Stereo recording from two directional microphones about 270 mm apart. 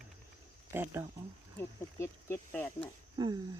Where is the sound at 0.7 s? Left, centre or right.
Centre.